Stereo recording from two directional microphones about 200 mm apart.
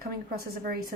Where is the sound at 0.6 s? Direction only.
50° right (ahead or behind).